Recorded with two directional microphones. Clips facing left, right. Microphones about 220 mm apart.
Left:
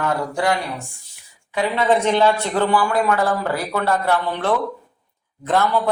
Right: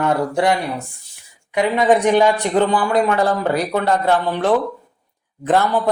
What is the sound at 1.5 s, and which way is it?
Speech, 15° right (ahead or behind).